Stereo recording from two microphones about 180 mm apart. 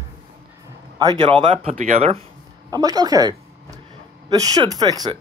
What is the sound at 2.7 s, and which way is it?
Speech, 20° right (ahead or behind).